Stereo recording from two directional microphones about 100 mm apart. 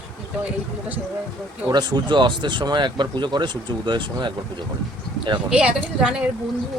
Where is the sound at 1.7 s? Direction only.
45° right (ahead or behind).